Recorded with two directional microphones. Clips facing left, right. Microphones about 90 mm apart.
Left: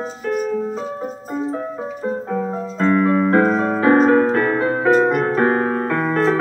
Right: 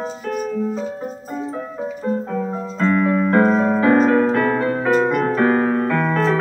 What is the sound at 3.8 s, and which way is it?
Music, 35° left (ahead or behind).